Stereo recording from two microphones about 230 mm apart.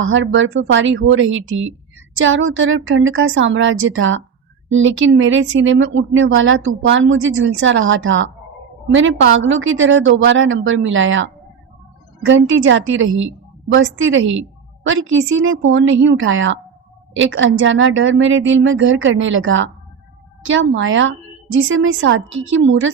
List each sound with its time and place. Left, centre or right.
0.0 s speech: right